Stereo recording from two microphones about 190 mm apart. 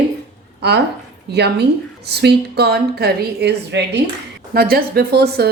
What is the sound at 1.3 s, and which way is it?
A woman's voice, 60° right (ahead or behind).